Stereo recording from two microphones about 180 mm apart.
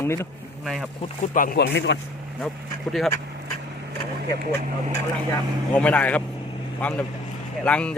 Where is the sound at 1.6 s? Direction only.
75° left (ahead or behind).